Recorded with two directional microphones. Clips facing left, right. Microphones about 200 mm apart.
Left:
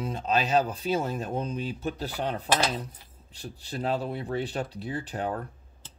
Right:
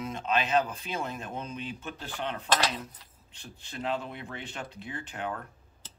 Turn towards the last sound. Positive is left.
turn(degrees=35)  # may be behind; listen again after turning